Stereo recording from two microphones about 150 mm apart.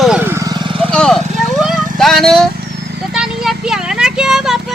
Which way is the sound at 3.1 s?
5° right (ahead or behind).